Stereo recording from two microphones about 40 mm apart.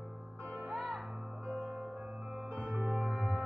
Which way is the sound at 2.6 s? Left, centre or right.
Right.